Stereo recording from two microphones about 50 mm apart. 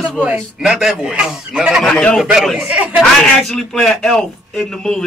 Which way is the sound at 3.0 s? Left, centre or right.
Centre.